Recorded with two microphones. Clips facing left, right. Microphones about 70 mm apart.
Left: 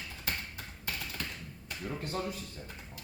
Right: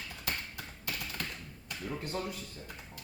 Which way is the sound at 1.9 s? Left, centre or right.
Centre.